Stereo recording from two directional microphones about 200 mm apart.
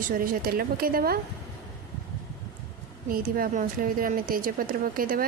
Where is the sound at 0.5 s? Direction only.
45° right (ahead or behind).